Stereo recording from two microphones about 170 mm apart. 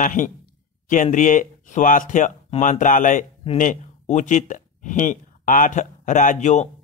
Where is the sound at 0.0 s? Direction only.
50° left (ahead or behind).